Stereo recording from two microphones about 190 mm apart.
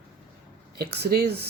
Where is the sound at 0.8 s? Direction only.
55° right (ahead or behind).